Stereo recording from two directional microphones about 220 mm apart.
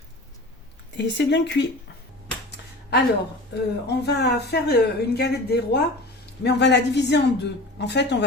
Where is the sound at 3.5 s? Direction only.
50° left (ahead or behind).